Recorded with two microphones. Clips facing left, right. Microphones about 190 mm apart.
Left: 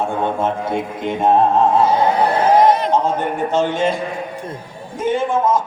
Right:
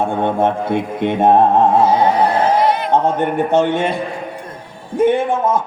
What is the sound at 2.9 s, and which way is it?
A man's voice, 65° right (ahead or behind).